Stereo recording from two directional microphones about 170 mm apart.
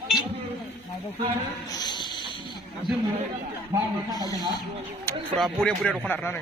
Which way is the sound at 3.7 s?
20° right (ahead or behind).